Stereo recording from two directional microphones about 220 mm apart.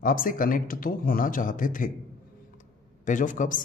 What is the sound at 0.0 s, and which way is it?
Speech, 40° left (ahead or behind).